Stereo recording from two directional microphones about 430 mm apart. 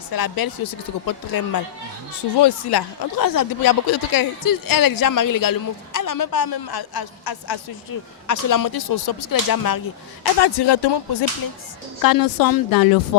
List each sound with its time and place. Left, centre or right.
0.1 s speech: left
8.3 s speech: left
10.4 s speech: left
12.0 s speech: left